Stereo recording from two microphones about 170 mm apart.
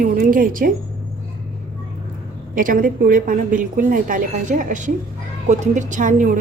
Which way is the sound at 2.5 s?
55° right (ahead or behind).